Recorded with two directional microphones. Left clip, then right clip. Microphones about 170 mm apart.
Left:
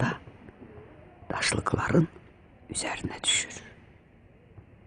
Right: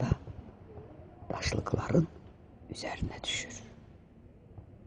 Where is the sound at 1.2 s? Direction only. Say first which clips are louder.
Left 7 dB; 20° left (ahead or behind).